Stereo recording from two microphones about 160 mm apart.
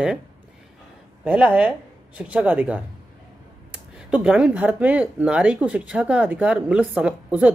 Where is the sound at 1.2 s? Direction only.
10° right (ahead or behind).